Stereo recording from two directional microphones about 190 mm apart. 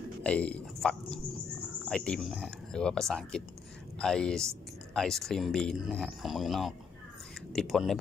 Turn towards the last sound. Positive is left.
turn(degrees=0)  # may be behind; listen again after turning